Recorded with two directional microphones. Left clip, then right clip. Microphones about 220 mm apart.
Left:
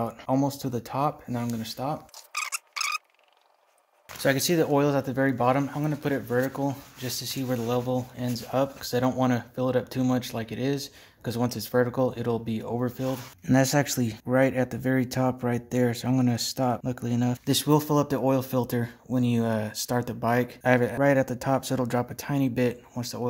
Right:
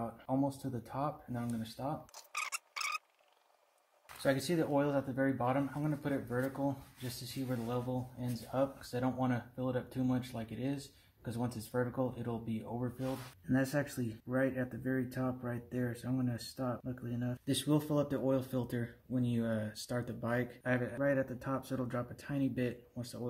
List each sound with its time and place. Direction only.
0.0 s speech: 45° left (ahead or behind)
2.3 s a sound: 5° left (ahead or behind)
4.2 s speech: 40° left (ahead or behind)